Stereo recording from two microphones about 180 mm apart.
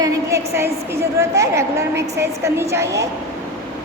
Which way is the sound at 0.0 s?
15° right (ahead or behind).